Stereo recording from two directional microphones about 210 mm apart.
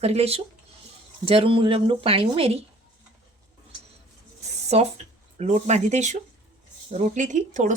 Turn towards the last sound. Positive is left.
turn(degrees=-35)  # may be behind; listen again after turning